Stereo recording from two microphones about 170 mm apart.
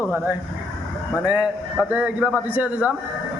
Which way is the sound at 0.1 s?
15° right (ahead or behind).